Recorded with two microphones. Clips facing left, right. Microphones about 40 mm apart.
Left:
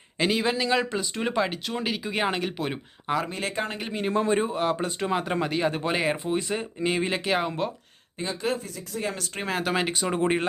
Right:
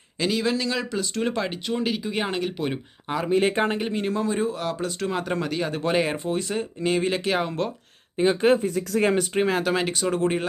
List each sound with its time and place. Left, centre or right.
0.2 s a man's voice: left
0.9 s speech: centre
3.2 s speech: centre
4.1 s a man's voice: left
5.0 s speech: centre
8.2 s speech: centre
8.5 s speech: right
8.9 s speech: right
9.5 s speech: centre